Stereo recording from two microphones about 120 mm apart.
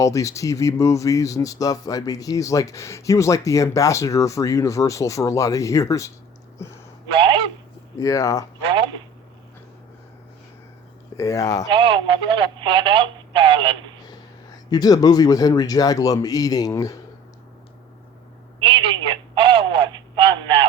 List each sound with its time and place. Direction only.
0.0 s speech: 25° left (ahead or behind)
7.1 s a sound: 50° right (ahead or behind)
7.9 s speech: 25° left (ahead or behind)
11.2 s speech: 25° left (ahead or behind)
11.7 s speech: 45° right (ahead or behind)
14.7 s speech: 35° left (ahead or behind)
18.6 s telephone: 45° right (ahead or behind)